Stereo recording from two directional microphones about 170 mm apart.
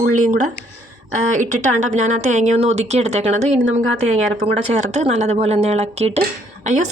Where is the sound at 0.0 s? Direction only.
50° right (ahead or behind).